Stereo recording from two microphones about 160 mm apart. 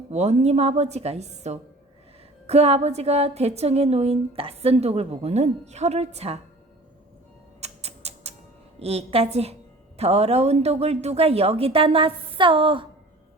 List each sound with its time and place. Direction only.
0.1 s a woman's voice: 45° right (ahead or behind)
7.6 s a sound: 40° right (ahead or behind)
8.8 s a woman's voice: 40° right (ahead or behind)